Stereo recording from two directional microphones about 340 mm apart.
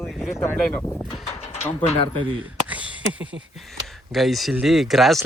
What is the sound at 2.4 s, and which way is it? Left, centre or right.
Speech, centre.